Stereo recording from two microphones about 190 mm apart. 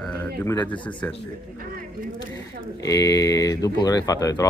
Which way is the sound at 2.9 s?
20° left (ahead or behind).